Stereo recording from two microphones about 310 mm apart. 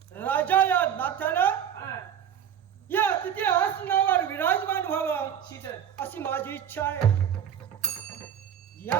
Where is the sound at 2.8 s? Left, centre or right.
Centre.